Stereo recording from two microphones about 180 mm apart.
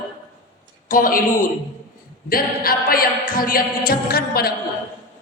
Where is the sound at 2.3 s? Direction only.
55° left (ahead or behind).